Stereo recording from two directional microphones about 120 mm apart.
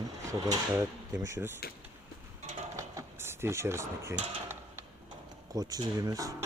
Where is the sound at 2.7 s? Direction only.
25° right (ahead or behind).